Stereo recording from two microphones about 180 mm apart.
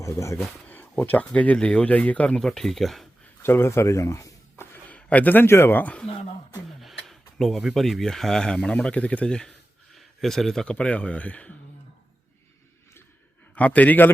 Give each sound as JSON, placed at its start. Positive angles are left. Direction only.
{"t": 0.0, "sound": "speech", "side_deg": 15}
{"t": 3.4, "sound": "speech", "side_deg": 15}
{"t": 7.1, "sound": "speech", "side_deg": 0}
{"t": 13.6, "sound": "speech", "side_deg": 10}